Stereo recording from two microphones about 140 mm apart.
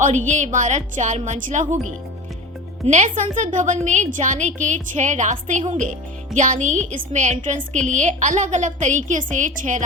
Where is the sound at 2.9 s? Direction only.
60° right (ahead or behind).